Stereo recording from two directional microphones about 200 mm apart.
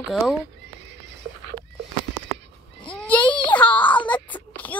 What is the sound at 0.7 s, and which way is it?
Horse, 60° right (ahead or behind).